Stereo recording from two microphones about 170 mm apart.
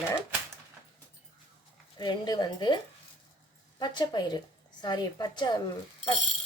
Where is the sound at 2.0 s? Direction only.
25° left (ahead or behind).